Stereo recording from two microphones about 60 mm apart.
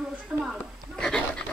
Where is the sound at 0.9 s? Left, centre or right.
Centre.